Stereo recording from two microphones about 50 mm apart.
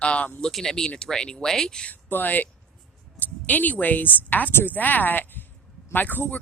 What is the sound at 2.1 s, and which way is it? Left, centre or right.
Speech, left.